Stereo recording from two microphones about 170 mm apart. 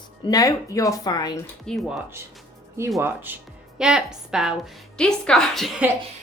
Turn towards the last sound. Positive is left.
turn(degrees=0)  # may be behind; listen again after turning